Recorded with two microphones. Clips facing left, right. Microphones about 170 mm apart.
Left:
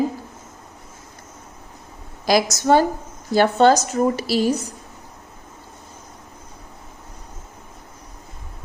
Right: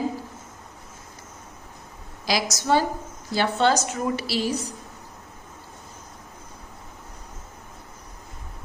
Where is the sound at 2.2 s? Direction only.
50° left (ahead or behind).